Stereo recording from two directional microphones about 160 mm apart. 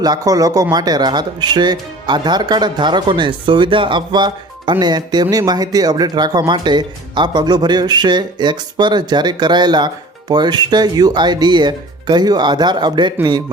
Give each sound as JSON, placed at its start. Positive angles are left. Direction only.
{"t": 0.0, "sound": "speech", "side_deg": -25}